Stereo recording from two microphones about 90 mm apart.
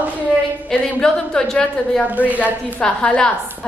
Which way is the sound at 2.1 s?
15° right (ahead or behind).